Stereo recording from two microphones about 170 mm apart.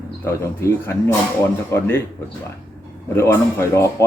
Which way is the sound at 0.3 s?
15° left (ahead or behind).